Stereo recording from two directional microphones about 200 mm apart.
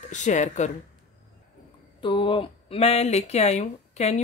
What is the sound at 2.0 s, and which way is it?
Speech, 25° left (ahead or behind).